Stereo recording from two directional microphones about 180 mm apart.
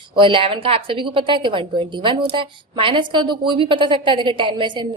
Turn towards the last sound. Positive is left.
turn(degrees=-25)  # may be behind; listen again after turning